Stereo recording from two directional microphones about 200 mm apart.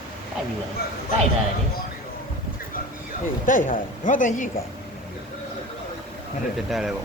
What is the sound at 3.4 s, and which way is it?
Speech, 40° left (ahead or behind).